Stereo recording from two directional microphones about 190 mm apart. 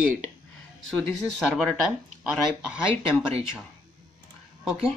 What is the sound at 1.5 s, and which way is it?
Speech, centre (ahead or behind).